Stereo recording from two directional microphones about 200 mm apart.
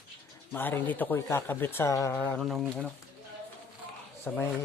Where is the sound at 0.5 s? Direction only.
10° left (ahead or behind).